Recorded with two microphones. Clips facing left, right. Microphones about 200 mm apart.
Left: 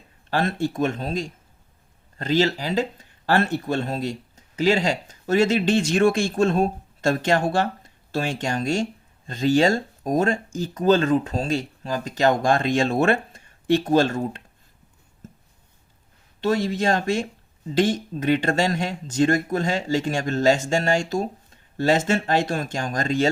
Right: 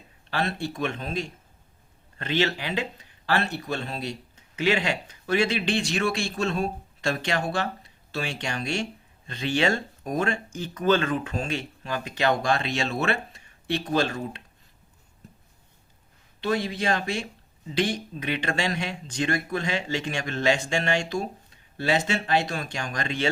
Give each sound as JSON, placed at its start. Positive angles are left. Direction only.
{"t": 0.3, "sound": "speech", "side_deg": 45}
{"t": 16.4, "sound": "speech", "side_deg": 45}